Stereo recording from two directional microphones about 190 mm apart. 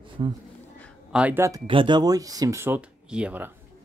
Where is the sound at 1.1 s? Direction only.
5° right (ahead or behind).